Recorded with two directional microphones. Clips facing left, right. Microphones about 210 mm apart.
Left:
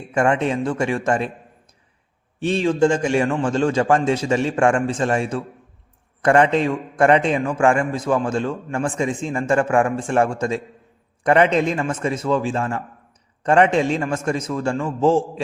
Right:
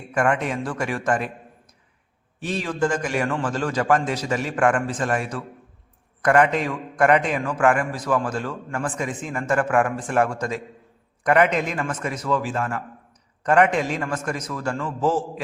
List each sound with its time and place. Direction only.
0.1 s a man's voice: 25° left (ahead or behind)
2.4 s a man's voice: 25° left (ahead or behind)